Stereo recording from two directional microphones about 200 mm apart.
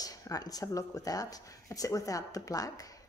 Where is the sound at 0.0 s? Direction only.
15° left (ahead or behind).